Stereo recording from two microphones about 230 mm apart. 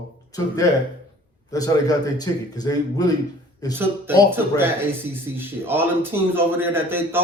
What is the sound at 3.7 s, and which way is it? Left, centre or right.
Speech, centre.